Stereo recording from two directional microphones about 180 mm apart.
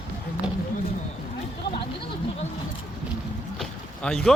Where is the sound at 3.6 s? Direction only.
5° left (ahead or behind).